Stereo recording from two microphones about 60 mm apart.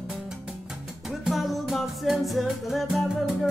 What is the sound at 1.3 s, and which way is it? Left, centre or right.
Music, centre.